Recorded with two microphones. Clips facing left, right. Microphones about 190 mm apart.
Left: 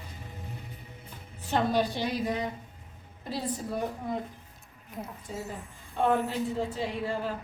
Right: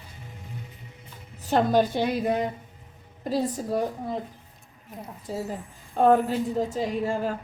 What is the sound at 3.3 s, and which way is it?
Speech, 45° right (ahead or behind).